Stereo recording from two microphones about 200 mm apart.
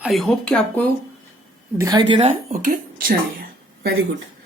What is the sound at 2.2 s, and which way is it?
Speech, 30° right (ahead or behind).